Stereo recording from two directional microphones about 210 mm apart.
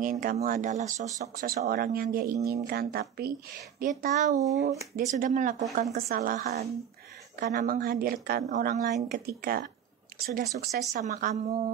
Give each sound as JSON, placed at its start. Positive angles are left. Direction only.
{"t": 0.0, "sound": "speech", "side_deg": -40}
{"t": 7.3, "sound": "speech", "side_deg": -45}